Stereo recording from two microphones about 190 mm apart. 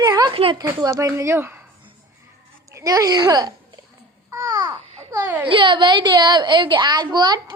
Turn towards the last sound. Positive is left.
turn(degrees=-20)  # may be behind; listen again after turning